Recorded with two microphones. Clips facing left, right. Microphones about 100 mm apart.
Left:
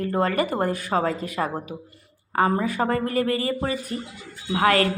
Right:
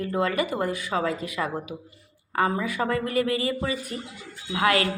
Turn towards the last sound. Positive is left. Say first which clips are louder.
# left 3 dB
turn(degrees=40)  # may be behind; listen again after turning